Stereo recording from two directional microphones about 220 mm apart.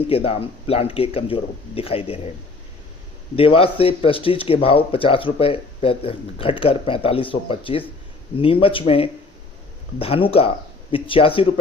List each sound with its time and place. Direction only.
0.1 s speech: 25° left (ahead or behind)
3.3 s speech: 25° left (ahead or behind)